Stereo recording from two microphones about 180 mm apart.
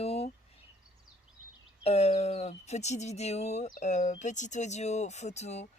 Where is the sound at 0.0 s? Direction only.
35° left (ahead or behind).